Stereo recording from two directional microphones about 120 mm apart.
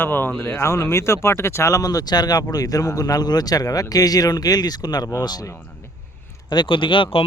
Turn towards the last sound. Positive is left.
turn(degrees=45)  # may be behind; listen again after turning